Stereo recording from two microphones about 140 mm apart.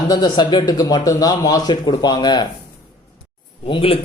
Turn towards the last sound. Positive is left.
turn(degrees=40)  # may be behind; listen again after turning